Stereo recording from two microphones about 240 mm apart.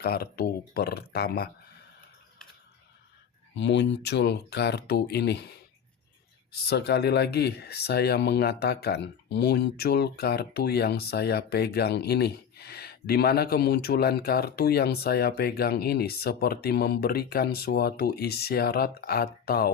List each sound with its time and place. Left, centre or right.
0.0 s speech: left
3.5 s speech: left